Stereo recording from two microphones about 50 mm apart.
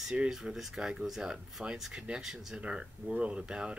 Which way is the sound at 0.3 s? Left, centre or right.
Centre.